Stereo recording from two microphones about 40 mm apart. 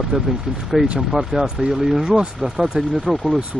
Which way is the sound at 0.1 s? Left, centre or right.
Centre.